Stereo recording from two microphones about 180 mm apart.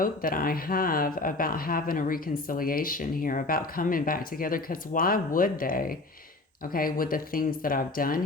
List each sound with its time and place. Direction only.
0.0 s speech: 50° left (ahead or behind)